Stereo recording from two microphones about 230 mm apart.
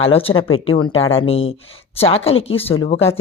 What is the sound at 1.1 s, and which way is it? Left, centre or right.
A woman's voice, left.